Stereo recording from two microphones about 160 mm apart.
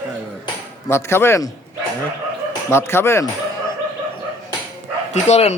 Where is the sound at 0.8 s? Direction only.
15° left (ahead or behind).